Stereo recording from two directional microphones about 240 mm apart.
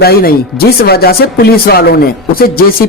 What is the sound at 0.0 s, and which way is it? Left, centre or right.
Speech, left.